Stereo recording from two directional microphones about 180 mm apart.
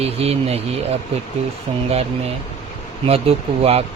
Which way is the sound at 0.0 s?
35° right (ahead or behind).